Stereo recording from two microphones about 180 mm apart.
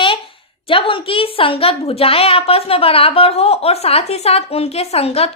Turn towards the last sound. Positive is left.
turn(degrees=35)  # may be behind; listen again after turning